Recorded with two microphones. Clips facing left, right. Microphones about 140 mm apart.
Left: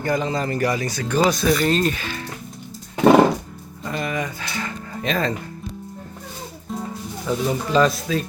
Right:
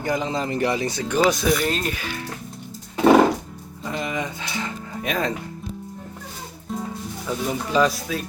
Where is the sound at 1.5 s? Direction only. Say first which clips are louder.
Left 3 dB; 5° right (ahead or behind).